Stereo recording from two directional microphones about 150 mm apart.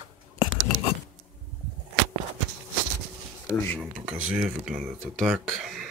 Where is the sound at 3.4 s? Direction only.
15° left (ahead or behind).